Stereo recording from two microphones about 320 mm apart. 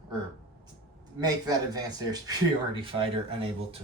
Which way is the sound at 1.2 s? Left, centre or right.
Centre.